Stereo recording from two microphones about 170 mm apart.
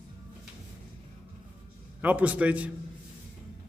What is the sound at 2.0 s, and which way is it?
Speech, 10° right (ahead or behind).